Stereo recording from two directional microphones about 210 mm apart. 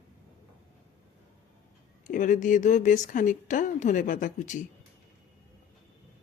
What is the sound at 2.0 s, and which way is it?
Speech, 40° left (ahead or behind).